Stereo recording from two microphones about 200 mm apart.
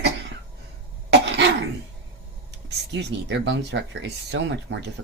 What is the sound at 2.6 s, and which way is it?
Speech, 60° right (ahead or behind).